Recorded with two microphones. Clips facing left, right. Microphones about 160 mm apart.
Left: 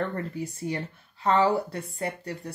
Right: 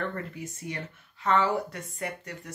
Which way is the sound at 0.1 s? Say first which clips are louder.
Left 4 dB; 35° left (ahead or behind).